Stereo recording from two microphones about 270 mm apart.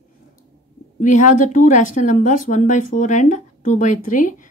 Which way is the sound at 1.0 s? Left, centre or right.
Left.